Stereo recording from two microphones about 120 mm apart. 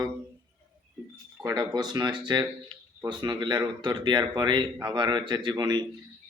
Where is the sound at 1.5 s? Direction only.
35° right (ahead or behind).